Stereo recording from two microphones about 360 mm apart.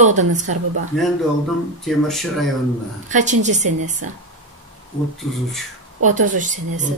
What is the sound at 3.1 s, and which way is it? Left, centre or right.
Speech, centre.